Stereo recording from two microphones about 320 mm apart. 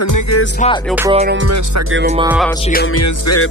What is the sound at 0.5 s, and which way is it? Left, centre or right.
Music, centre.